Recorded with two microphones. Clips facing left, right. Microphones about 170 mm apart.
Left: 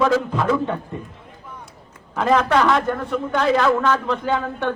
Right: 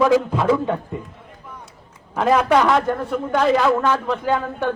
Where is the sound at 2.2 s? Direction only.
5° right (ahead or behind).